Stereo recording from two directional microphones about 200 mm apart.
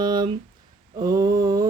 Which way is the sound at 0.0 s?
20° right (ahead or behind).